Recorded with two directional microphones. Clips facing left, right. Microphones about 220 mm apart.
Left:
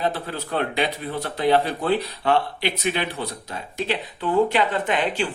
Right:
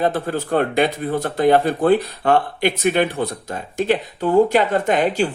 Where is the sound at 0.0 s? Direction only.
50° right (ahead or behind).